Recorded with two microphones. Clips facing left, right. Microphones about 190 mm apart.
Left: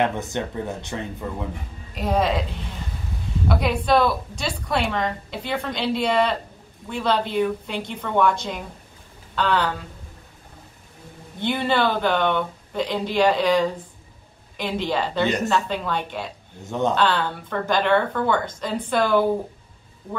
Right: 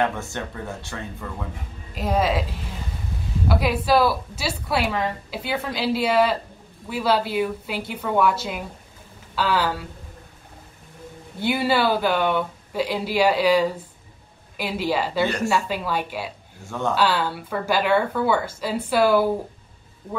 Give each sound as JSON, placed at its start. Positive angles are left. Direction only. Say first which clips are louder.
{"t": 0.0, "sound": "speech", "louder": "left 2 dB", "side_deg": 20}
{"t": 2.0, "sound": "a woman's voice", "louder": "even", "side_deg": 0}
{"t": 3.4, "sound": "a woman's voice", "louder": "even", "side_deg": -5}
{"t": 11.3, "sound": "speech", "louder": "right 1 dB", "side_deg": -5}
{"t": 16.6, "sound": "speech", "louder": "left 3 dB", "side_deg": 20}
{"t": 16.9, "sound": "speech", "louder": "even", "side_deg": -5}